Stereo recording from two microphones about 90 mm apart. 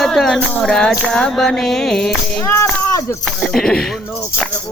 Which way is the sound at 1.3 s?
5° left (ahead or behind).